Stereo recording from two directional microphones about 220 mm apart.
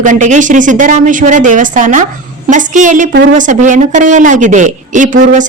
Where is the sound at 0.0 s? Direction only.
35° right (ahead or behind).